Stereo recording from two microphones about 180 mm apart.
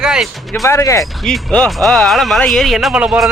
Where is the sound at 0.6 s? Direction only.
15° left (ahead or behind).